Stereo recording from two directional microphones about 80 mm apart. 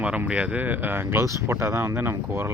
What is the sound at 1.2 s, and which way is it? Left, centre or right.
Speech, right.